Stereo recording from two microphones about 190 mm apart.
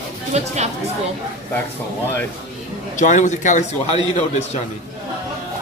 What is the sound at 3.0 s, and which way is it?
A man's voice, 40° left (ahead or behind).